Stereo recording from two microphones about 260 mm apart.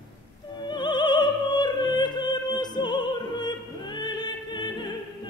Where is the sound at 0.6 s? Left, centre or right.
Centre.